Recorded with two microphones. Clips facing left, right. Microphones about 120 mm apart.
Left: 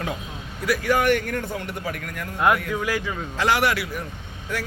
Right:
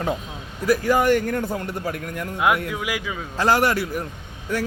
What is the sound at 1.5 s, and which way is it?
Speech, 40° right (ahead or behind).